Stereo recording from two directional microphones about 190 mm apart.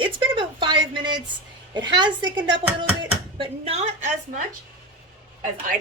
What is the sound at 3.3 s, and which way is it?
Speech, 30° right (ahead or behind).